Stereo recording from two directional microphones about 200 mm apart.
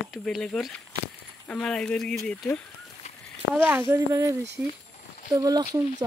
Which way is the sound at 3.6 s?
10° right (ahead or behind).